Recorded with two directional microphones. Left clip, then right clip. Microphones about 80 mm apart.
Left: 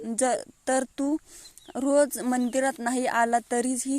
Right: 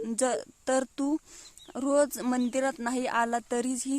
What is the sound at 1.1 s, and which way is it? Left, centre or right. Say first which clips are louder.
Speech: left 1 dB; centre.